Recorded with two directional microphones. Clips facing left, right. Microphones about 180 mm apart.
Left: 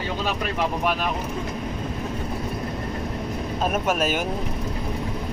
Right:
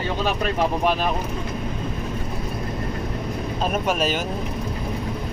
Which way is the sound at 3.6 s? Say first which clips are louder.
Even; 5° left (ahead or behind).